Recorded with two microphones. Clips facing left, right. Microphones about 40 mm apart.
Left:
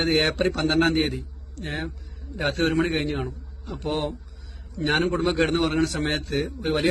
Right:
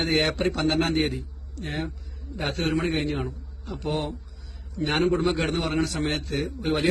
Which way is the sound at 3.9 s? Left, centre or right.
Left.